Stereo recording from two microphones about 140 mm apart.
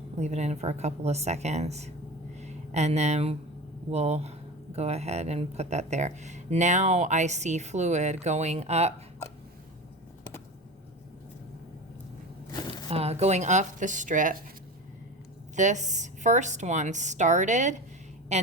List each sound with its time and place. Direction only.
0.2 s speech: 55° right (ahead or behind)
12.9 s a woman's voice: 50° right (ahead or behind); by 14.3 s 65° right (ahead or behind)
15.5 s a woman's voice: 60° right (ahead or behind)